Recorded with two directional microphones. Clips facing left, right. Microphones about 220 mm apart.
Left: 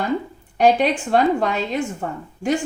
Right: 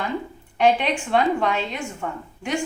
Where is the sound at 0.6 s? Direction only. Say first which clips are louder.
Left 3 dB; 40° left (ahead or behind).